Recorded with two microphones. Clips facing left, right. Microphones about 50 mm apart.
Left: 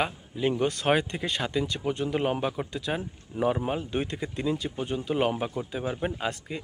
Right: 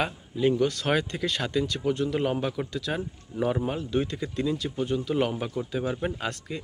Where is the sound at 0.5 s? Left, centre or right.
Left.